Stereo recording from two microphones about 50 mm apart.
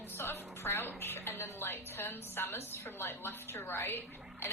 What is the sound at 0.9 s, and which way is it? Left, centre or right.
A woman's voice, left.